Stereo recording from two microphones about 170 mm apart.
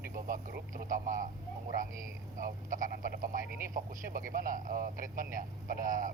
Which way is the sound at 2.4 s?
50° right (ahead or behind).